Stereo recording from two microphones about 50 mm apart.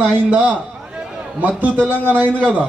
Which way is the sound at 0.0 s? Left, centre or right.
Right.